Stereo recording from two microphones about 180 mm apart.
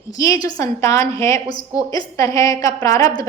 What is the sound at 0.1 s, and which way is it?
A woman's voice, 20° left (ahead or behind).